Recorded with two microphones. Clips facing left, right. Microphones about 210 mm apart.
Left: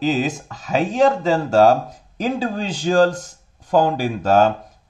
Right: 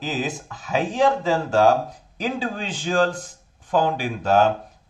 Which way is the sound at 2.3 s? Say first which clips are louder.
Left 4 dB; 40° left (ahead or behind).